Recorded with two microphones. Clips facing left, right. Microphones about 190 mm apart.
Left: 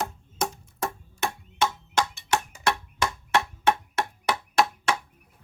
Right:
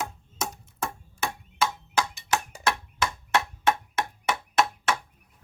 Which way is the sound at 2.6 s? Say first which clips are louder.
Left 1 dB; 5° right (ahead or behind).